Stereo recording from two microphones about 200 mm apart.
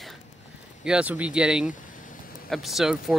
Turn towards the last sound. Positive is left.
turn(degrees=0)  # may be behind; listen again after turning